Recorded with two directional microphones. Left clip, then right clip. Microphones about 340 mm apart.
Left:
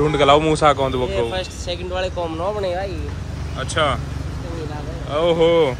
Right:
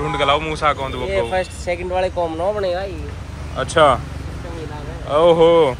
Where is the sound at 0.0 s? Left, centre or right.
Centre.